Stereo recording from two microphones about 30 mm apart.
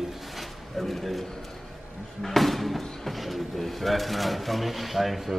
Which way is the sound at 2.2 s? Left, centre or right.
Centre.